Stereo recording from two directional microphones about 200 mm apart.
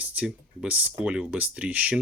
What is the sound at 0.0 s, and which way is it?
Speech, 5° right (ahead or behind).